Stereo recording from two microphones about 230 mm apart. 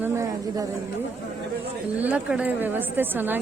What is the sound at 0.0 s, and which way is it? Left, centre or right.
Speech, centre.